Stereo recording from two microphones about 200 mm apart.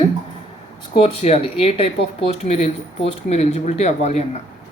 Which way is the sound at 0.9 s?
30° left (ahead or behind).